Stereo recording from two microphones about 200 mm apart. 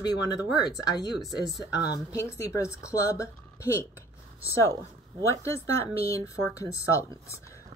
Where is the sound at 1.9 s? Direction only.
15° left (ahead or behind).